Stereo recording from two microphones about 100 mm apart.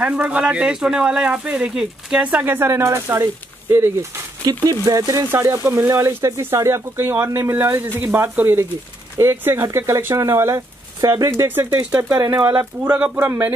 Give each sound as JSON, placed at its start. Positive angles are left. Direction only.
{"t": 0.0, "sound": "speech", "side_deg": -15}
{"t": 4.4, "sound": "speech", "side_deg": -40}
{"t": 11.0, "sound": "speech", "side_deg": -40}
{"t": 11.4, "sound": "speech", "side_deg": -25}
{"t": 13.0, "sound": "speech", "side_deg": -15}